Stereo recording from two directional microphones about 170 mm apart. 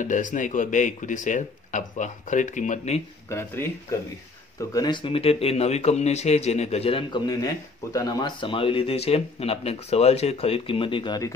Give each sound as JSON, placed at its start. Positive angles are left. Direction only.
{"t": 0.0, "sound": "speech", "side_deg": 50}
{"t": 3.3, "sound": "speech", "side_deg": 15}